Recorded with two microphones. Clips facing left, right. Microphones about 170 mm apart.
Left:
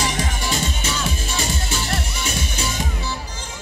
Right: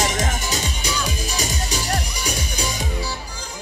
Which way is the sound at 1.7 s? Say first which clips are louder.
Right 1 dB; 40° right (ahead or behind).